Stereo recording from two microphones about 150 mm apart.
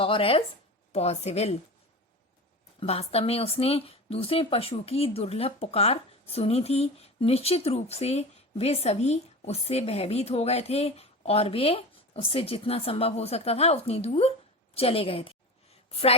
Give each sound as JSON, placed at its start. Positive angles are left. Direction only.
{"t": 0.0, "sound": "a woman's voice", "side_deg": 35}
{"t": 2.8, "sound": "a woman's voice", "side_deg": 40}